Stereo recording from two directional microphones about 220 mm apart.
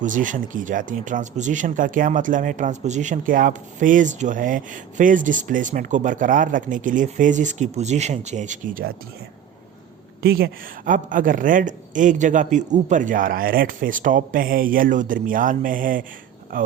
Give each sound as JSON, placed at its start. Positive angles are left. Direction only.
{"t": 0.0, "sound": "speech", "side_deg": -35}
{"t": 10.2, "sound": "speech", "side_deg": -45}